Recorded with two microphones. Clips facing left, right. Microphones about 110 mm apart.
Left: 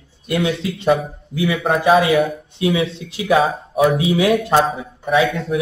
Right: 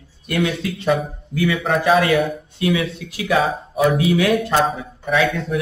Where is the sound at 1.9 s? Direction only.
5° left (ahead or behind).